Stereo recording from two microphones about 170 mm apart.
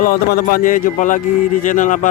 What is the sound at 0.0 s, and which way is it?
A man's voice, 60° left (ahead or behind).